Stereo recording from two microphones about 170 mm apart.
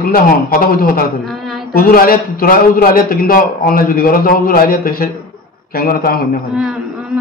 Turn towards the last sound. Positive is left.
turn(degrees=-5)  # may be behind; listen again after turning